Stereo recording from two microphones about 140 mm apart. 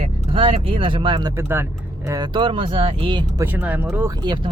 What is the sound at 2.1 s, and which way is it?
Speech, 30° right (ahead or behind).